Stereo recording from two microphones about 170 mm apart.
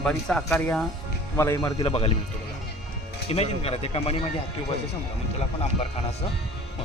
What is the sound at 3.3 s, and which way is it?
Speech, 35° left (ahead or behind).